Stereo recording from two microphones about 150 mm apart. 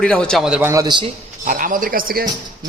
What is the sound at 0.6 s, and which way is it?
Speech, 20° right (ahead or behind).